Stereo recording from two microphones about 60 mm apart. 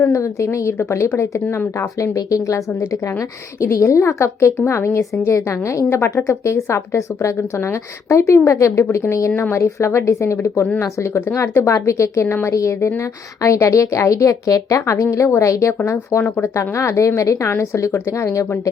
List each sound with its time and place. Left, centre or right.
0.0 s a woman's voice: left
9.3 s a woman's voice: left
15.3 s a woman's voice: left
17.5 s a woman's voice: left